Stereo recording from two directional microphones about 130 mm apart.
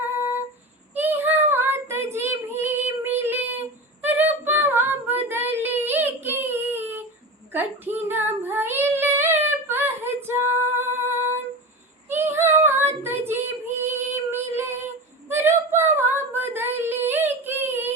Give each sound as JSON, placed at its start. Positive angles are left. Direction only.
{"t": 0.9, "sound": "child singing", "side_deg": -15}
{"t": 4.0, "sound": "female singing", "side_deg": -15}
{"t": 12.0, "sound": "child singing", "side_deg": -20}
{"t": 13.8, "sound": "female singing", "side_deg": -20}